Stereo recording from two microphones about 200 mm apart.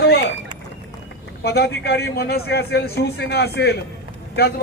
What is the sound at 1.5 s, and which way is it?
A man's voice, 55° left (ahead or behind).